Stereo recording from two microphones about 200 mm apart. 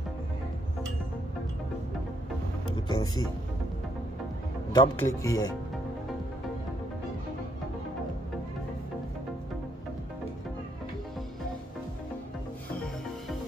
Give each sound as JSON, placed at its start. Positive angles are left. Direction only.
{"t": 2.9, "sound": "speech", "side_deg": 90}
{"t": 4.7, "sound": "speech", "side_deg": 15}